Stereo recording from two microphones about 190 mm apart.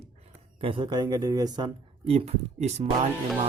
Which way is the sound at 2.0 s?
30° right (ahead or behind).